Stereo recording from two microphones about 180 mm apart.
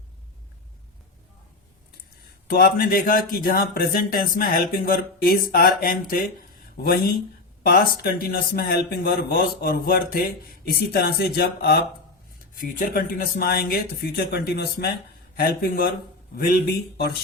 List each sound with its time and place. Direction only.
2.5 s speech: 55° left (ahead or behind)
12.5 s speech: 50° left (ahead or behind)